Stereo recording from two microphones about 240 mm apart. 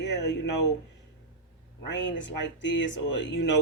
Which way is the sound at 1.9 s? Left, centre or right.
Left.